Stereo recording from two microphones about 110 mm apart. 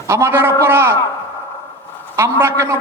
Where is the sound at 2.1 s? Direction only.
25° right (ahead or behind).